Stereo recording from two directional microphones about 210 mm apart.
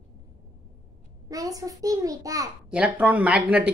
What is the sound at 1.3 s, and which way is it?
A child's voice, 15° right (ahead or behind).